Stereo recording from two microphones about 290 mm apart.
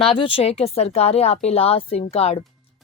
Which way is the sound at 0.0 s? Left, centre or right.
Centre.